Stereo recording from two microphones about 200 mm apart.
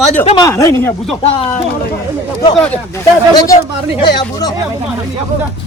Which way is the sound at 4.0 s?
20° left (ahead or behind).